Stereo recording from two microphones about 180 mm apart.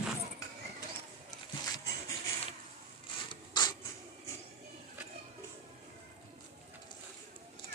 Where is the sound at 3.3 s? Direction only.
25° left (ahead or behind).